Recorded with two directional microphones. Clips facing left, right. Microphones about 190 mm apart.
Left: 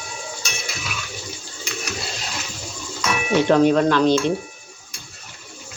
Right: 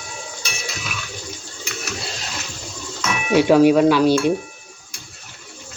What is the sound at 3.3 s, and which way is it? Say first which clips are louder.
Speech: right 3 dB; 10° right (ahead or behind).